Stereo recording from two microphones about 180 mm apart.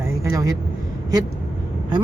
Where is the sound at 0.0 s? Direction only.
15° right (ahead or behind).